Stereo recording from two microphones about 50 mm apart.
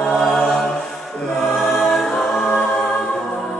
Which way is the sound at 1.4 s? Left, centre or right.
Centre.